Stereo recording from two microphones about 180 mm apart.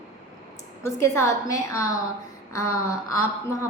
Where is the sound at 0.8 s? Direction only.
15° left (ahead or behind).